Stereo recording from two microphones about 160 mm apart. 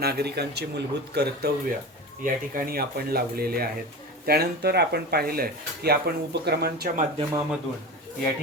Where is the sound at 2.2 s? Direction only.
65° right (ahead or behind).